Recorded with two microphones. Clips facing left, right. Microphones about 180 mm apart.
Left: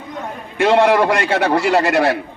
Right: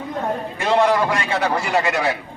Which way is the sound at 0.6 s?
70° left (ahead or behind).